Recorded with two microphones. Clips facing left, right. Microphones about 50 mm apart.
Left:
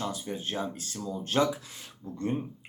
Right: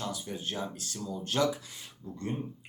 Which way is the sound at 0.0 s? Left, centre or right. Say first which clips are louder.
Left 3 dB; left.